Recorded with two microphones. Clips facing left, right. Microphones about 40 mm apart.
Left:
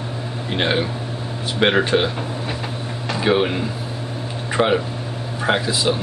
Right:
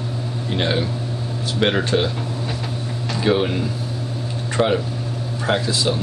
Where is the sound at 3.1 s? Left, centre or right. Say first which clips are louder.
Left 1 dB; centre.